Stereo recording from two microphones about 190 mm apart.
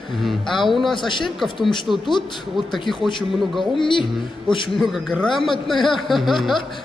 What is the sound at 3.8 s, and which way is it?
Speech, 25° left (ahead or behind).